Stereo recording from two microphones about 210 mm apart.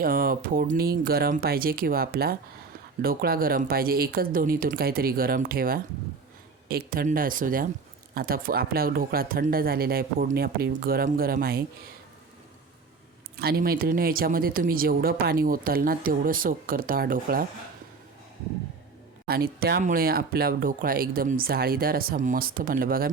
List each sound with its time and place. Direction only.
0.0 s speech: 45° right (ahead or behind)
13.4 s speech: 45° right (ahead or behind)
19.3 s speech: 45° right (ahead or behind)